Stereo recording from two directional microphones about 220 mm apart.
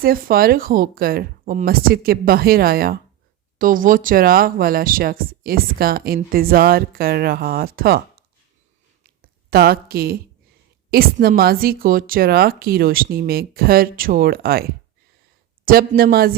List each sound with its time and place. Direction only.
0.0 s speech: 40° right (ahead or behind)
9.5 s speech: 45° right (ahead or behind)